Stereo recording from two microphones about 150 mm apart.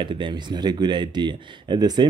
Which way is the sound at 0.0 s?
30° right (ahead or behind).